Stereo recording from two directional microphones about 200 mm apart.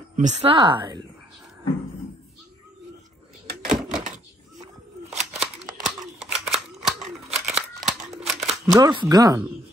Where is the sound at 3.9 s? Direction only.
40° right (ahead or behind).